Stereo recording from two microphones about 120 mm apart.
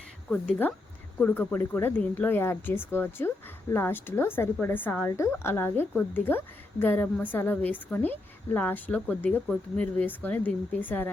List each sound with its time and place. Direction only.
0.3 s speech: 10° left (ahead or behind)